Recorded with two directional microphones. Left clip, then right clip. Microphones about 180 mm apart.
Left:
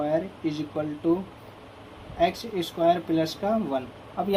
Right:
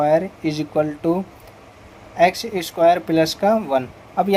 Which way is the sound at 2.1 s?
50° right (ahead or behind).